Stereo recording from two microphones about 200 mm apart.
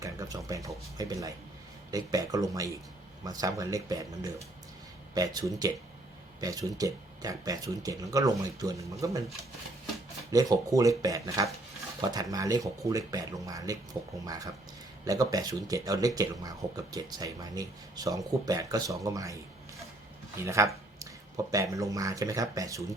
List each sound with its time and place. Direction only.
0.0 s speech: 15° right (ahead or behind)
10.3 s speech: 15° right (ahead or behind)